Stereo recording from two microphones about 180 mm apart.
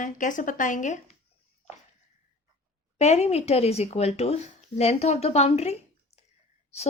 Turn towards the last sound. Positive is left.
turn(degrees=35)  # may be behind; listen again after turning